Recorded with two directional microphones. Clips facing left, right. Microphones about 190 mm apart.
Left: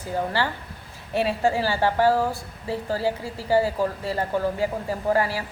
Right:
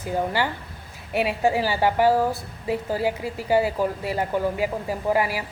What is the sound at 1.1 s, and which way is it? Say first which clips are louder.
A woman's voice: right 1 dB; 15° right (ahead or behind).